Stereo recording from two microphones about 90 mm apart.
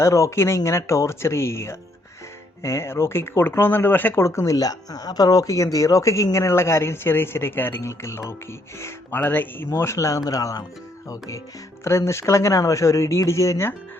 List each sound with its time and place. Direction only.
0.0 s speech: 35° left (ahead or behind)
4.2 s speech: 35° left (ahead or behind)
11.9 s speech: 30° left (ahead or behind)